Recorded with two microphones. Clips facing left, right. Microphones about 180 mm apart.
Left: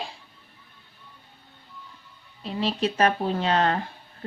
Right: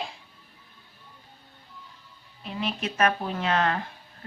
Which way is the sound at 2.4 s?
30° left (ahead or behind).